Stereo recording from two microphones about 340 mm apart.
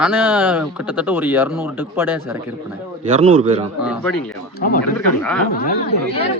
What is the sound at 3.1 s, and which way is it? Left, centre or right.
Speech, centre.